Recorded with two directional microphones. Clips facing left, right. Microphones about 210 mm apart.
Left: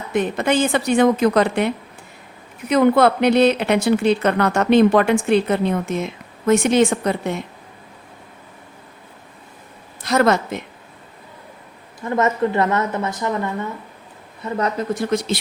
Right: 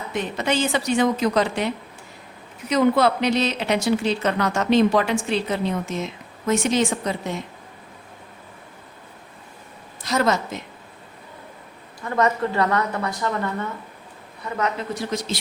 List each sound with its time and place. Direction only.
0.1 s a woman's voice: 50° left (ahead or behind)
10.0 s a woman's voice: 60° left (ahead or behind)
11.9 s a woman's voice: 20° left (ahead or behind)
14.8 s a woman's voice: 55° left (ahead or behind)